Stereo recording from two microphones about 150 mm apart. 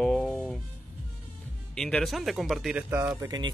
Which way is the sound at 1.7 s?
5° left (ahead or behind).